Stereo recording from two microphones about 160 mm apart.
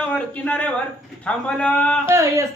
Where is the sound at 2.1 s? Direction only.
15° right (ahead or behind).